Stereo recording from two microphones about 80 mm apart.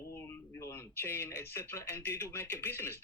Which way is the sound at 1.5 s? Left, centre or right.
Left.